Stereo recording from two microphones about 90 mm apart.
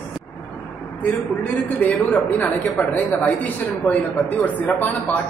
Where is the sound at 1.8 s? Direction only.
20° left (ahead or behind).